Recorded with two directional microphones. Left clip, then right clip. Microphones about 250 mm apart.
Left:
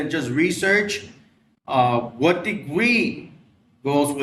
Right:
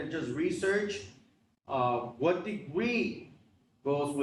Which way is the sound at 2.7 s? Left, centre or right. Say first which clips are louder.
Left 12 dB; left.